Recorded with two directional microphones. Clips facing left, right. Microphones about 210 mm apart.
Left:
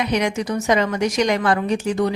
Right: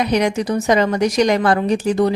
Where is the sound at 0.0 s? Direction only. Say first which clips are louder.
Right 4 dB; 35° right (ahead or behind).